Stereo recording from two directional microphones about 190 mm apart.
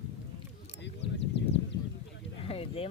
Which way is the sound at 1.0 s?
65° left (ahead or behind).